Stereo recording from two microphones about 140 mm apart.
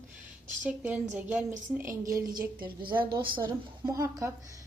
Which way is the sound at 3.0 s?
35° right (ahead or behind).